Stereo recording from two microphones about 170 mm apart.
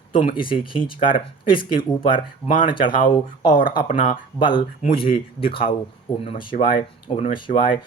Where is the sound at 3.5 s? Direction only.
55° left (ahead or behind).